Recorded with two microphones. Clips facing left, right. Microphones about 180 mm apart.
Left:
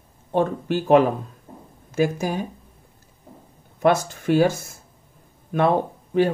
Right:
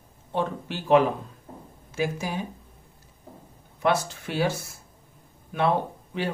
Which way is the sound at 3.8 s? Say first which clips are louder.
Left 6 dB; 50° left (ahead or behind).